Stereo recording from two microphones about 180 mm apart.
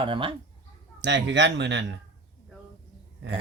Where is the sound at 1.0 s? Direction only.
80° right.